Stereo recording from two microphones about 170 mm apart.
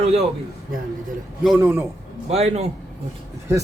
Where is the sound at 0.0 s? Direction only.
35° right (ahead or behind).